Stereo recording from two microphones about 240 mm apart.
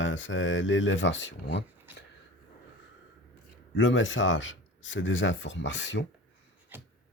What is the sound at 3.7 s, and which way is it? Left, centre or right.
Speech, left.